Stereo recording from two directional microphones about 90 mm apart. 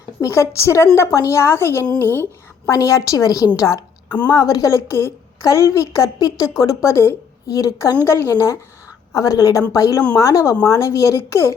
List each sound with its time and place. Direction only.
0.2 s a woman's voice: 30° left (ahead or behind)
2.6 s a woman's voice: 35° left (ahead or behind)
8.0 s a woman's voice: 30° left (ahead or behind)